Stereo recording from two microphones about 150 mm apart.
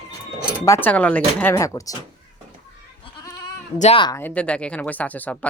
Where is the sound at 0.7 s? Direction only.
10° left (ahead or behind).